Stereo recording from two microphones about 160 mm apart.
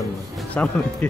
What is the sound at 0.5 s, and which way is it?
Speech, 10° left (ahead or behind).